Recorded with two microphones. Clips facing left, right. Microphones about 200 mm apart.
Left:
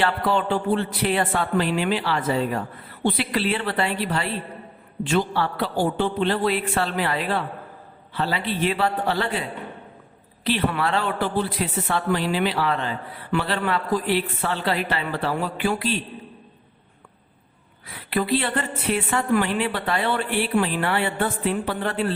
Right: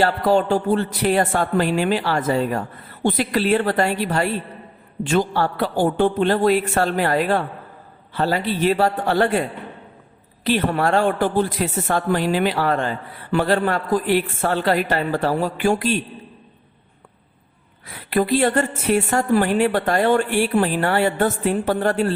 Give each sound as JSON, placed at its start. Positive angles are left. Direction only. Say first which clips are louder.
{"t": 0.0, "sound": "speech", "louder": "right 5 dB", "side_deg": -40}
{"t": 17.9, "sound": "speech", "louder": "right 4 dB", "side_deg": -45}